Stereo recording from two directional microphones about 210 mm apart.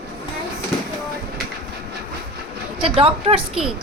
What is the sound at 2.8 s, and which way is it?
Speech, 25° right (ahead or behind).